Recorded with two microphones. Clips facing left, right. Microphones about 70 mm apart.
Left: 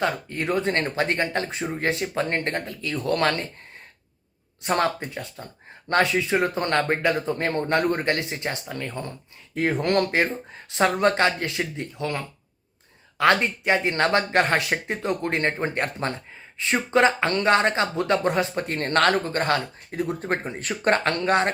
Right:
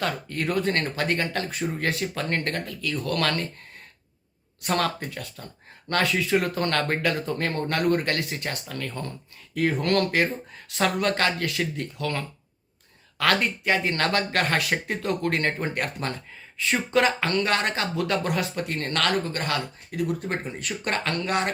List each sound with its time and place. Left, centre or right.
0.0 s speech: left
4.6 s speech: left